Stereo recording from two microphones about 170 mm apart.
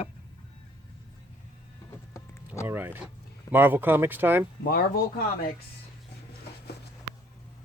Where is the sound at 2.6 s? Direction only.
10° right (ahead or behind).